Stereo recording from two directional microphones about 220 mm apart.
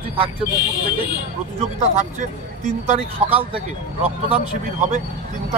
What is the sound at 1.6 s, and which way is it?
Speech, 30° right (ahead or behind).